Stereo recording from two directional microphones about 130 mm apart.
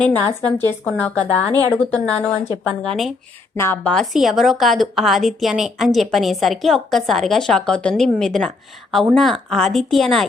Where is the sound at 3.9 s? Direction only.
Centre (ahead or behind).